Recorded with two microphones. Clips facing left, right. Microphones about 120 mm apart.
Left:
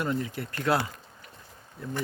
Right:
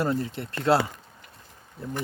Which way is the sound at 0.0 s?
35° right (ahead or behind).